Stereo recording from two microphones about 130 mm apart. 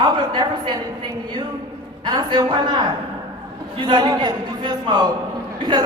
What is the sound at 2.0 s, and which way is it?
A woman's voice, 35° right (ahead or behind).